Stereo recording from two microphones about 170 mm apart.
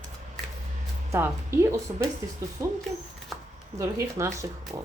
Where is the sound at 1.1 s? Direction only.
15° right (ahead or behind).